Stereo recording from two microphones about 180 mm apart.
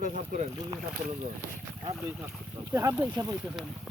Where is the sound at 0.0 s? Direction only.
45° right (ahead or behind).